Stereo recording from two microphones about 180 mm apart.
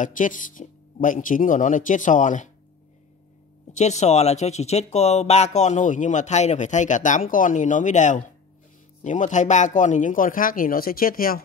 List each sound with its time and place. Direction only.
0.0 s speech: 45° left (ahead or behind)
3.7 s speech: 40° left (ahead or behind)